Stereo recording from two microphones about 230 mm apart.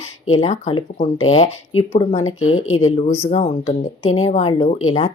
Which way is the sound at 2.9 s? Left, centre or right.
Left.